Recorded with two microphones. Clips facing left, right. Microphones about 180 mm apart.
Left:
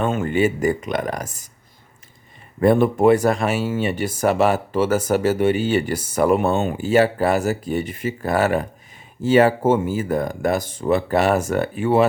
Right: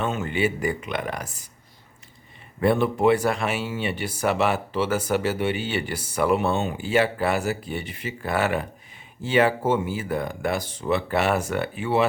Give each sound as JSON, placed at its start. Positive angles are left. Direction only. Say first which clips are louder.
{"t": 0.0, "sound": "speech", "louder": "left 5 dB", "side_deg": 50}
{"t": 2.6, "sound": "speech", "louder": "left 5 dB", "side_deg": 45}